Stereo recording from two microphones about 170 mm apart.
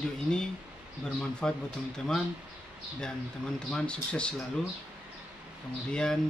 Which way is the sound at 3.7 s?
5° left (ahead or behind).